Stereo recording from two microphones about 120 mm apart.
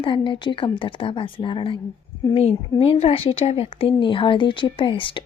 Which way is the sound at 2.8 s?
55° left (ahead or behind).